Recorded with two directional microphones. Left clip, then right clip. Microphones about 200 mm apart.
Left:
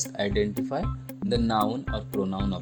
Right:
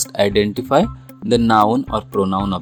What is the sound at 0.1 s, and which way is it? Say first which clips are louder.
Speech: right 12 dB; 25° right (ahead or behind).